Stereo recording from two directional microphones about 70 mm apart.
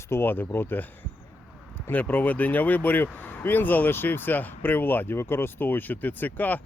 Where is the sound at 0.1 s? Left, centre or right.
Left.